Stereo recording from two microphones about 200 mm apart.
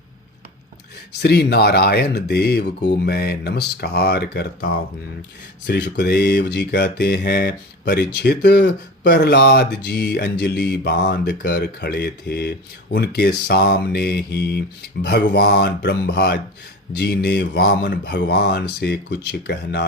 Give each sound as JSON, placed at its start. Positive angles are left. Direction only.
{"t": 1.2, "sound": "speech", "side_deg": 55}
{"t": 5.6, "sound": "mantra", "side_deg": 60}